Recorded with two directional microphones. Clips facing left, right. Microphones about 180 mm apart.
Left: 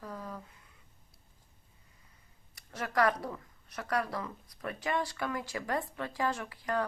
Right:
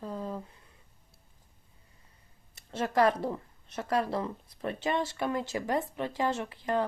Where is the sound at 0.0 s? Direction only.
25° right (ahead or behind).